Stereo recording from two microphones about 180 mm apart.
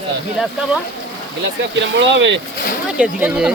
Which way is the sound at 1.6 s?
85° right.